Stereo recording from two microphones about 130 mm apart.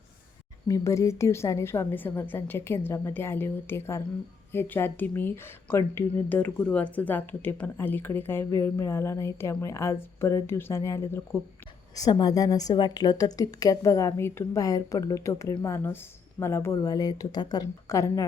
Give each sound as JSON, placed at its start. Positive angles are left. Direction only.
{"t": 0.7, "sound": "a woman's voice", "side_deg": 25}